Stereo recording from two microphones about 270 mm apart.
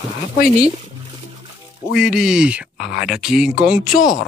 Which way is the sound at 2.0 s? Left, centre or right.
Centre.